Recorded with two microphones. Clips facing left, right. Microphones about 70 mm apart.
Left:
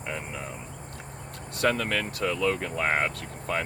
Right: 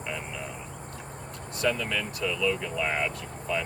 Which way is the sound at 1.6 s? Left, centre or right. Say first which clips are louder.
Left 2 dB; left.